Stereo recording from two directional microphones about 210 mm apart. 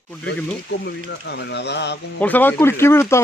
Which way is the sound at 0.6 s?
55° left (ahead or behind).